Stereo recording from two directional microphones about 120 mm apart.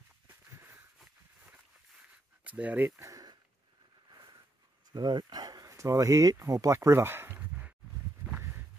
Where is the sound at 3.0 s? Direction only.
30° right (ahead or behind).